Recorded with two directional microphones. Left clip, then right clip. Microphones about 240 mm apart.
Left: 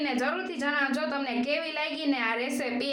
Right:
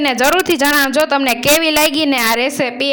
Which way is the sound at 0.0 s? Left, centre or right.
Right.